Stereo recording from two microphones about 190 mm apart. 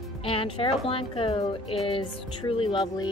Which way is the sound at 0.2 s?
30° left (ahead or behind).